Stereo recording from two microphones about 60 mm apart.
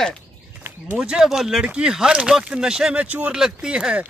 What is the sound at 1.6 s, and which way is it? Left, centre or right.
Speech, centre.